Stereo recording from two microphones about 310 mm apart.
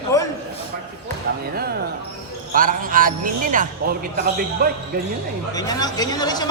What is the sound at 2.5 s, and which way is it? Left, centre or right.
A man's voice, right.